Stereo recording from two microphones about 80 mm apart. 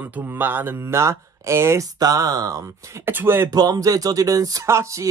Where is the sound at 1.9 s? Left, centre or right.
Right.